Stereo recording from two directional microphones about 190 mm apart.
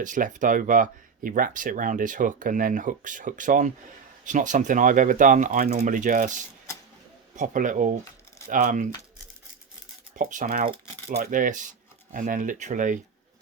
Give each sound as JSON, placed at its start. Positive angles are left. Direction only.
{"t": 0.0, "sound": "speech", "side_deg": -45}
{"t": 10.2, "sound": "speech", "side_deg": -45}